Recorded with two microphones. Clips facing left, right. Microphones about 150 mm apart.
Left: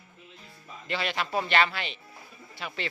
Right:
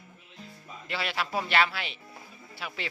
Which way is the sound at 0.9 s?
5° right (ahead or behind).